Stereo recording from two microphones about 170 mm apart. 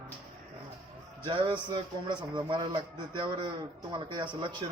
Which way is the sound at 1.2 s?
25° right (ahead or behind).